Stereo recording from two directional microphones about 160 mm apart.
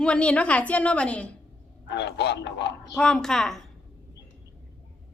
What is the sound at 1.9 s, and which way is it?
Speech, 90° left.